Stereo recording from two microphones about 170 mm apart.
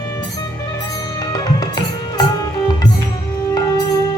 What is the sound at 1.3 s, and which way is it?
Music, 25° left (ahead or behind).